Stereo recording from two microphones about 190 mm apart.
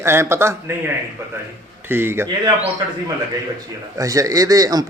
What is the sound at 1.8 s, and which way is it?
Speech, 10° right (ahead or behind).